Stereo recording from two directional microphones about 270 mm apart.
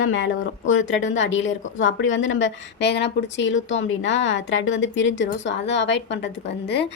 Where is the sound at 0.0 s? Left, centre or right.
Left.